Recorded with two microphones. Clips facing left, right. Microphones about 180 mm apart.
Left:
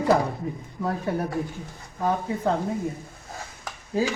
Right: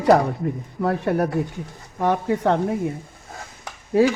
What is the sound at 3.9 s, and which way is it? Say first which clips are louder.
Speech: right 8 dB; 70° right (ahead or behind).